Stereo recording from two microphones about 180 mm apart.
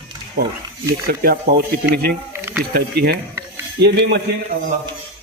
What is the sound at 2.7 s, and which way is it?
Speech, 60° right (ahead or behind).